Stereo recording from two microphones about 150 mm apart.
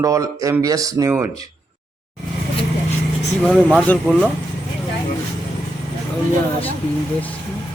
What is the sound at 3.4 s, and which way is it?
Speech, 5° left (ahead or behind).